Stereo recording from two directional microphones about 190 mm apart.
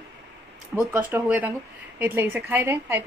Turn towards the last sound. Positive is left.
turn(degrees=-15)  # may be behind; listen again after turning